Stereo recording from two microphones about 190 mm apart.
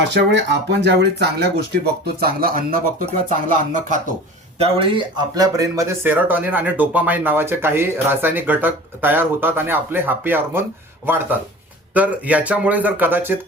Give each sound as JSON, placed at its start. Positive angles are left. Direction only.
{"t": 0.0, "sound": "speech", "side_deg": -65}
{"t": 4.5, "sound": "speech", "side_deg": -30}